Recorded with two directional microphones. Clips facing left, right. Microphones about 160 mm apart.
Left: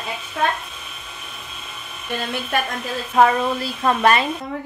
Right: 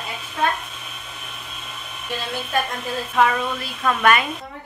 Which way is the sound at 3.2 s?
35° left (ahead or behind).